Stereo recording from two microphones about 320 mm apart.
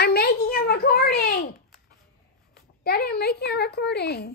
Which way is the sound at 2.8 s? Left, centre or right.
Left.